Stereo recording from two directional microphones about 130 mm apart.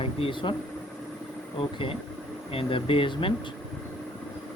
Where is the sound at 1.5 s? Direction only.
45° left (ahead or behind).